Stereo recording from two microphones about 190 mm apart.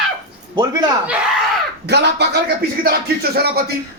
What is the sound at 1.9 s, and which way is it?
Speech, 60° right (ahead or behind).